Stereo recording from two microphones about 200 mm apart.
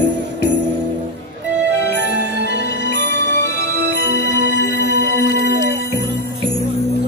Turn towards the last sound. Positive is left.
turn(degrees=55)  # may be behind; listen again after turning